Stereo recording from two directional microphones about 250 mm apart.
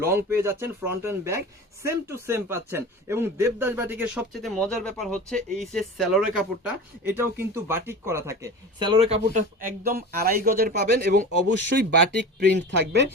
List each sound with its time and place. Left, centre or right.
0.2 s speech: centre; by 13.1 s right